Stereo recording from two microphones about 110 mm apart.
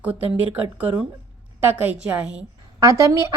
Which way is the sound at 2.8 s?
30° right (ahead or behind).